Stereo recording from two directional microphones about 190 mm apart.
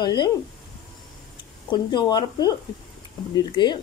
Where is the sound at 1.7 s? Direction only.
20° left (ahead or behind).